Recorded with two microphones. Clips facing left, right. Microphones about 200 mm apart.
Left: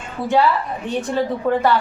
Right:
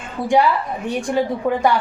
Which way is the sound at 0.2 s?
15° right (ahead or behind).